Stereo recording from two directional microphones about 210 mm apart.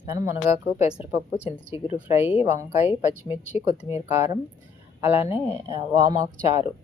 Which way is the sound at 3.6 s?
15° right (ahead or behind).